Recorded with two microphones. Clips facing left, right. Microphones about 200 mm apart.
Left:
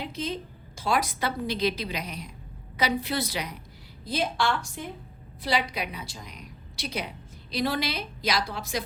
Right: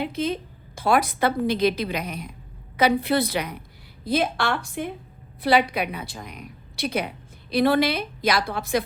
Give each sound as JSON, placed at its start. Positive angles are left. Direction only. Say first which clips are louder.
{"t": 0.0, "sound": "a woman's voice", "louder": "right 6 dB", "side_deg": -60}